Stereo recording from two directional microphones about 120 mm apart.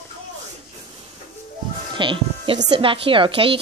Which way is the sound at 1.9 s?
45° right (ahead or behind).